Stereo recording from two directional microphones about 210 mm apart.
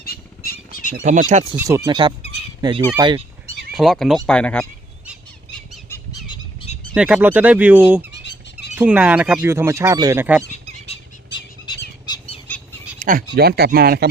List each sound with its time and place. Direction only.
0.0 s a sound: 45° left (ahead or behind)
1.0 s speech: 35° right (ahead or behind)
1.5 s speech: 15° right (ahead or behind)
2.6 s fowl: 20° right (ahead or behind)
3.8 s speech: centre (ahead or behind)
5.0 s squeal: centre (ahead or behind)
5.9 s fowl: 20° left (ahead or behind)
6.9 s speech: 5° right (ahead or behind)
8.1 s a sound: 55° left (ahead or behind)
8.7 s speech: 5° right (ahead or behind)
11.6 s bird: 20° left (ahead or behind)
13.0 s a sound: 40° right (ahead or behind)
13.3 s speech: 50° right (ahead or behind)